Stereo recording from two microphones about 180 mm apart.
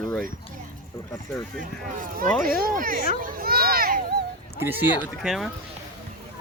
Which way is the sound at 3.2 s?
55° right (ahead or behind).